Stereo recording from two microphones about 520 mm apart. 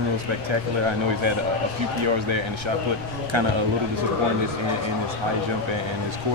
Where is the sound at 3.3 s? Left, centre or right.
Right.